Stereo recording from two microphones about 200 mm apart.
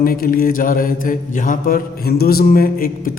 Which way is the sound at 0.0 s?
45° left (ahead or behind).